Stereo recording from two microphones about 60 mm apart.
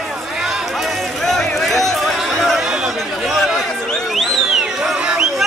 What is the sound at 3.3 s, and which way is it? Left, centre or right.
Speech, centre.